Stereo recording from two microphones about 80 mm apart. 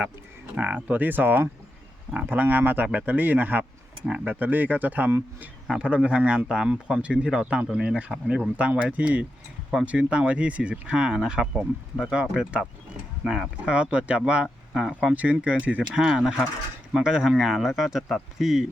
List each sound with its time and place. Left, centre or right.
0.5 s speech: centre
4.0 s speech: centre
4.3 s speech: right
5.6 s speech: centre
14.8 s speech: centre
15.1 s speech: centre